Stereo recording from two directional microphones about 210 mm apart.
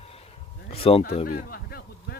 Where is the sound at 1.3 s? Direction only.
45° left (ahead or behind).